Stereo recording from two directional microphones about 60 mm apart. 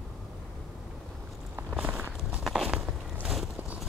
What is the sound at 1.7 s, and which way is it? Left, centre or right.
Walk, right.